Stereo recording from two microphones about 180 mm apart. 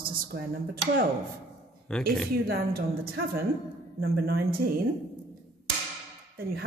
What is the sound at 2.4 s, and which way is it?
A woman's voice, 55° right (ahead or behind).